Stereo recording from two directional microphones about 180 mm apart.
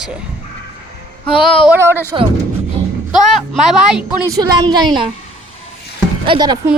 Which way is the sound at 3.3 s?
Centre (ahead or behind).